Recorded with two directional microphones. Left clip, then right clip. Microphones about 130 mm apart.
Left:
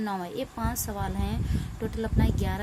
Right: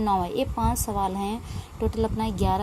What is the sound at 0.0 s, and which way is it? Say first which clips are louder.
A woman's voice: right 8 dB; 30° right (ahead or behind).